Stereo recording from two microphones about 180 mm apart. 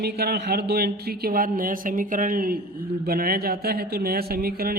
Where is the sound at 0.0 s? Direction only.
60° right (ahead or behind).